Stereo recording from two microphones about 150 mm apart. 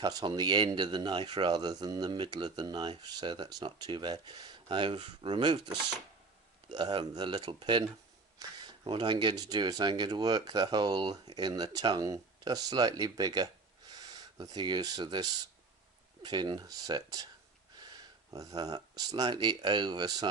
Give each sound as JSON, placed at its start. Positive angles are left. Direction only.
{"t": 0.0, "sound": "speech", "side_deg": -25}